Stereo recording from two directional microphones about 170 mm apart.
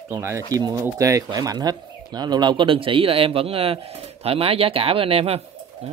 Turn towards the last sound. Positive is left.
turn(degrees=-35)  # may be behind; listen again after turning